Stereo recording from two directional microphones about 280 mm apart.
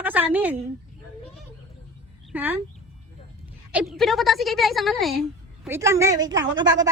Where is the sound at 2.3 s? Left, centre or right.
Centre.